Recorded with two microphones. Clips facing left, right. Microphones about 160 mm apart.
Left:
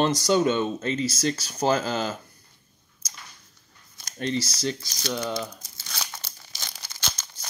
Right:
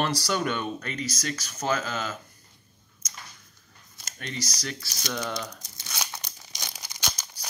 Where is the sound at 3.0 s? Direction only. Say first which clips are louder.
Left 1 dB; 35° left (ahead or behind).